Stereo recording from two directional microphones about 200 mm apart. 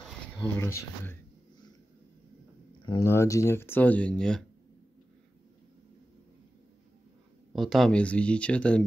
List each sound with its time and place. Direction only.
0.6 s speech: 15° left (ahead or behind)
2.8 s speech: 20° left (ahead or behind); by 4.5 s 5° left (ahead or behind)
7.5 s speech: centre (ahead or behind)